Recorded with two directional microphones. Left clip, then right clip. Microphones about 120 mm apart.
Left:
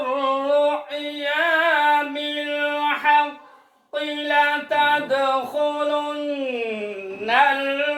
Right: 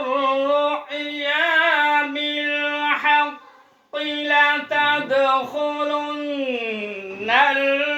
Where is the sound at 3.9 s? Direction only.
25° left (ahead or behind).